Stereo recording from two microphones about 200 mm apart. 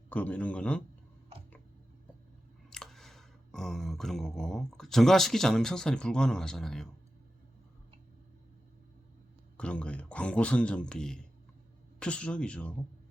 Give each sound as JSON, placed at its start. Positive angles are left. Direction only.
{"t": 0.1, "sound": "speech", "side_deg": 10}
{"t": 2.6, "sound": "a sound", "side_deg": 0}
{"t": 9.6, "sound": "speech", "side_deg": 5}